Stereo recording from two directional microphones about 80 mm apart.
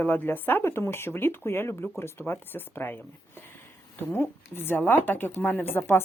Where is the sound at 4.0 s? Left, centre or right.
Left.